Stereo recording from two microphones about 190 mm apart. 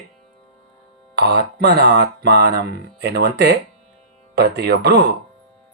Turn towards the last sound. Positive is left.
turn(degrees=-60)  # may be behind; listen again after turning